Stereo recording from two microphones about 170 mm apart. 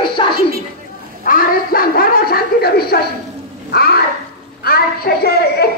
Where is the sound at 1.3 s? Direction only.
60° left (ahead or behind).